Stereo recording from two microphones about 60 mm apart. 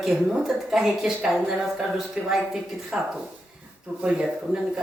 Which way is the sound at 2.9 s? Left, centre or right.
Centre.